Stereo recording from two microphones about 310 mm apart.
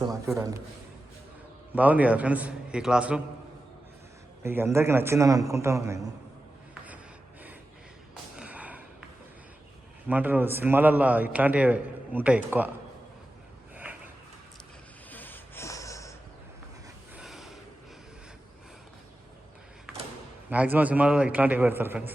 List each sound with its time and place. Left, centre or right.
0.3 s a man's voice: centre
1.7 s a man's voice: centre
4.4 s a man's voice: centre
8.1 s a sound: centre
10.1 s a man's voice: centre
15.1 s snort: centre
17.2 s gasp: centre
20.5 s a man's voice: centre